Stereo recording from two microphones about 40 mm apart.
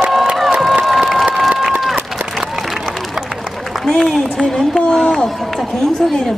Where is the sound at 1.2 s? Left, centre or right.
Centre.